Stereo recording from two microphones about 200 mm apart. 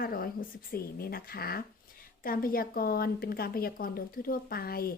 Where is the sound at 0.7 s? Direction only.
50° left (ahead or behind).